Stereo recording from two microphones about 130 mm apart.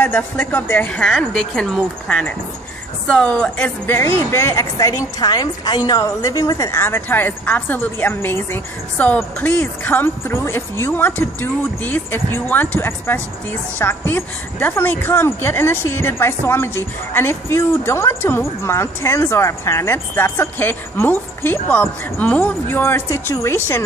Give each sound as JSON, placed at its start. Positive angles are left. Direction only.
{"t": 0.0, "sound": "a woman's voice", "side_deg": 10}